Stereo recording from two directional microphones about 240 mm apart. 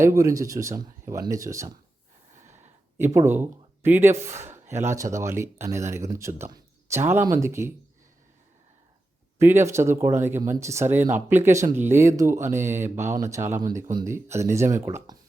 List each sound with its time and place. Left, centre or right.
0.0 s a man's voice: centre
3.0 s a man's voice: centre
9.4 s a man's voice: centre